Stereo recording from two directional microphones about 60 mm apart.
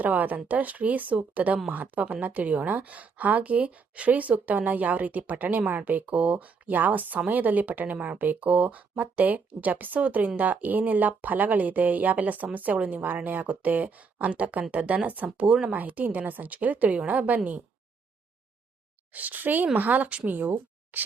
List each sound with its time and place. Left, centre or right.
0.0 s a woman's voice: right
19.1 s a woman's voice: right
20.9 s a sound: right